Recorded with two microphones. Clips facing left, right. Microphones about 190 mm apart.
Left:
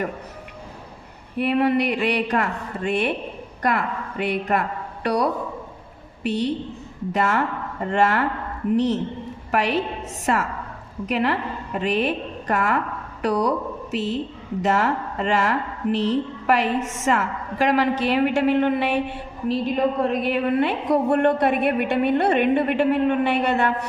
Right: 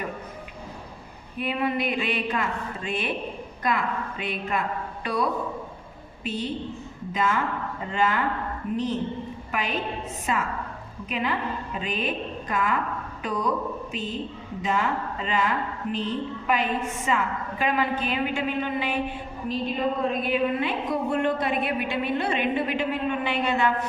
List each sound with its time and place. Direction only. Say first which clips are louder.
1.4 s a woman's voice: left 7 dB; 70° left (ahead or behind)